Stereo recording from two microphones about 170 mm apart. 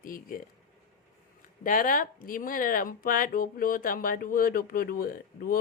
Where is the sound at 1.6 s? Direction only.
55° left (ahead or behind).